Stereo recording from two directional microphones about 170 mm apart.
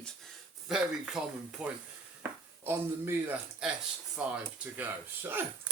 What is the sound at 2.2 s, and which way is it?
Speech, 15° right (ahead or behind).